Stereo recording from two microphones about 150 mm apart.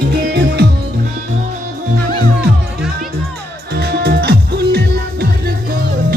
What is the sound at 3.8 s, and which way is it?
Music, 90° right.